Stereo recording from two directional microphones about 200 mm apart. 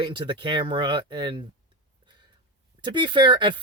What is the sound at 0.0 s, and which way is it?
Speech, 25° right (ahead or behind).